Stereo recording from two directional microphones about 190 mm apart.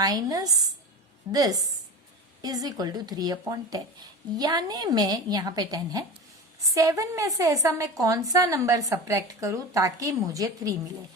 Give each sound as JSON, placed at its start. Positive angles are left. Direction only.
{"t": 0.0, "sound": "a woman's voice", "side_deg": -20}